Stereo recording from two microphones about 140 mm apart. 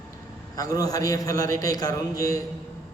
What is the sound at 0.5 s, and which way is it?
A man's voice, 25° left (ahead or behind).